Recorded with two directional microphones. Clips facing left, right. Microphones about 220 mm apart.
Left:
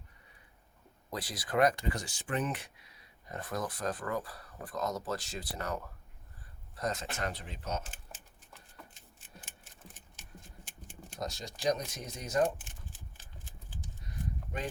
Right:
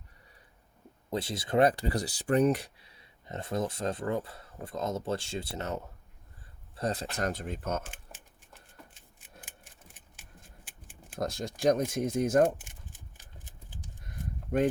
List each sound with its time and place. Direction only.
1.1 s speech: 25° right (ahead or behind); by 7.9 s 50° right (ahead or behind)
11.2 s speech: 55° right (ahead or behind)